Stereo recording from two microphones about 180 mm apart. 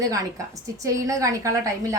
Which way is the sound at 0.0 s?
20° right (ahead or behind).